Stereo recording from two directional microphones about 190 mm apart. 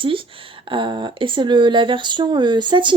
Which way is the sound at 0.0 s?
25° right (ahead or behind).